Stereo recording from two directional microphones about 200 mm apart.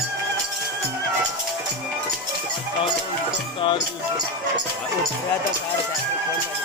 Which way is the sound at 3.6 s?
25° left (ahead or behind).